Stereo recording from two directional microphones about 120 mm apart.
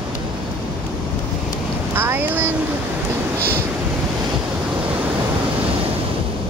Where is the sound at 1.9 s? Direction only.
20° right (ahead or behind).